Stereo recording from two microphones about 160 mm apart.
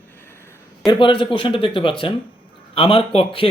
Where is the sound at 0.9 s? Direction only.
30° left (ahead or behind).